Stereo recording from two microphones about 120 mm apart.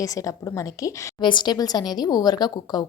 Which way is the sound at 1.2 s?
40° left (ahead or behind).